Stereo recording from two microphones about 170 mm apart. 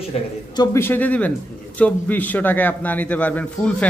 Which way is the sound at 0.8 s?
10° left (ahead or behind).